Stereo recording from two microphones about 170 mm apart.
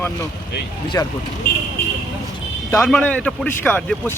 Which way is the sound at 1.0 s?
20° left (ahead or behind).